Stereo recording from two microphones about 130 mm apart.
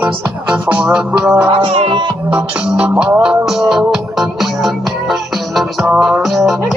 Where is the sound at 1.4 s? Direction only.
40° right (ahead or behind).